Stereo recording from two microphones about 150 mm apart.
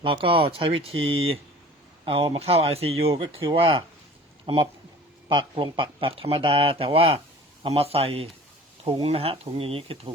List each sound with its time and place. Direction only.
0.0 s speech: 35° right (ahead or behind)